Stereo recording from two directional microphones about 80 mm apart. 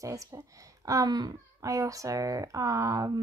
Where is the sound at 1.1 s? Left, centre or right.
Right.